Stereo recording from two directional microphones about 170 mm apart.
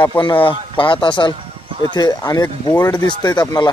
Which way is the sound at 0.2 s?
30° left (ahead or behind).